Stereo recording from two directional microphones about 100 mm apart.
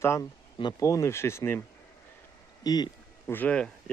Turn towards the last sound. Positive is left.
turn(degrees=10)  # may be behind; listen again after turning